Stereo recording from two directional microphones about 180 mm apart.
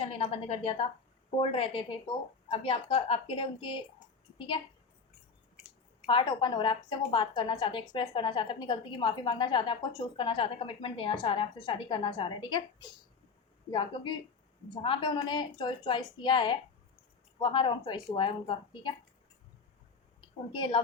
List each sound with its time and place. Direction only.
0.0 s a woman's voice: 30° left (ahead or behind)
6.1 s a woman's voice: 25° left (ahead or behind)
13.7 s a woman's voice: 25° left (ahead or behind)
20.2 s a woman's voice: 30° left (ahead or behind)